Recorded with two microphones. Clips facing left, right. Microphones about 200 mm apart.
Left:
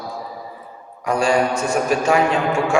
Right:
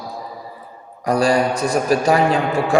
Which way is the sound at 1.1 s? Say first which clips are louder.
Right 2 dB; 35° right (ahead or behind).